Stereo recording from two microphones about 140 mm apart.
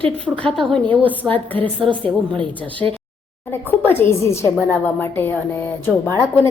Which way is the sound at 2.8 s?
20° left (ahead or behind).